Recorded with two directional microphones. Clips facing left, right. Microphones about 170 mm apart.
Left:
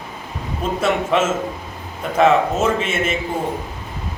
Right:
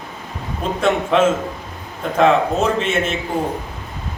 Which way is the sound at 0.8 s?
5° left (ahead or behind).